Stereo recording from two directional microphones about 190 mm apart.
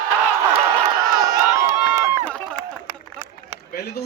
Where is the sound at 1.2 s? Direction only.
20° right (ahead or behind).